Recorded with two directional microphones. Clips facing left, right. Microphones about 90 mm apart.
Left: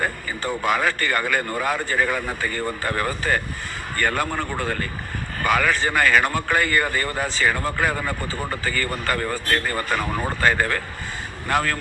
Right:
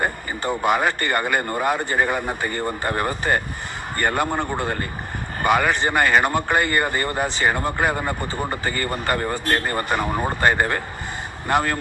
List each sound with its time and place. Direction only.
0.6 s speech: 20° right (ahead or behind)
10.0 s speech: 15° right (ahead or behind)